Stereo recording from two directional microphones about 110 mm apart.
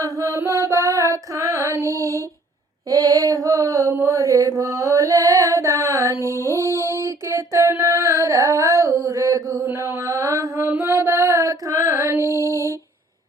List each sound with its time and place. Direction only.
0.0 s music: 30° right (ahead or behind)
2.9 s mantra: 30° right (ahead or behind)
6.6 s a sound: 25° right (ahead or behind)
6.9 s female singing: 25° right (ahead or behind)
9.6 s mantra: 25° right (ahead or behind)
10.7 s female singing: 20° right (ahead or behind)